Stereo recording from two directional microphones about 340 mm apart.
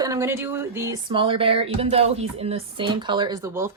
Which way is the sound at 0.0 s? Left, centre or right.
Centre.